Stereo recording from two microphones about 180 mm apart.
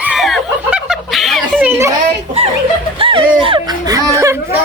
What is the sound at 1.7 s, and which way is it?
Speech, 15° right (ahead or behind).